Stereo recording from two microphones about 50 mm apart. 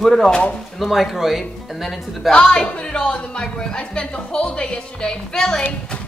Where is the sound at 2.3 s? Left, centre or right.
Centre.